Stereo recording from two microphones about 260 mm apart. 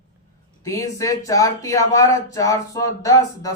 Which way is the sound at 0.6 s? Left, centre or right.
Centre.